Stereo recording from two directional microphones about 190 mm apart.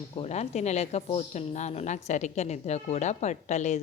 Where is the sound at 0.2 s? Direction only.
35° left (ahead or behind).